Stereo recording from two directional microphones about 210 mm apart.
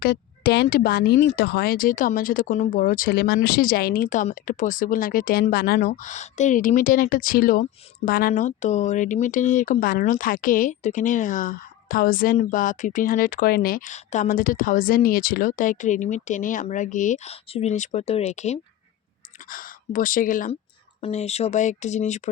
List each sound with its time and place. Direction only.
0.0 s speech: 50° left (ahead or behind); by 22.3 s 35° left (ahead or behind)